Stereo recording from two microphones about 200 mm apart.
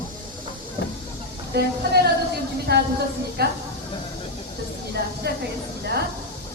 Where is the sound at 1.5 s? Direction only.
55° right (ahead or behind).